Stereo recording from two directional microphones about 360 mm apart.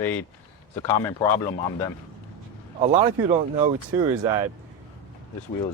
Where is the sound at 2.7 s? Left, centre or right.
Centre.